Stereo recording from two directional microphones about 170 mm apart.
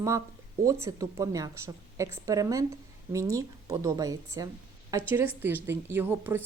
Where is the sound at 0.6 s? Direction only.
20° right (ahead or behind).